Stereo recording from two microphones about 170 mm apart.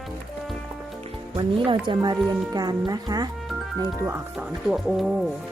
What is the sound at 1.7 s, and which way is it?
Speech, 25° right (ahead or behind).